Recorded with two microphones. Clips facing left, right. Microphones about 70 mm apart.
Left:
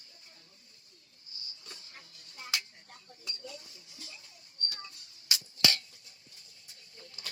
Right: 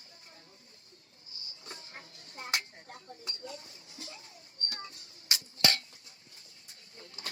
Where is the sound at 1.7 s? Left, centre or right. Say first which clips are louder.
Right 9 dB; right.